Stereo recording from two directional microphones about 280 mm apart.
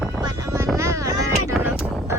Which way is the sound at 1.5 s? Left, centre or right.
Centre.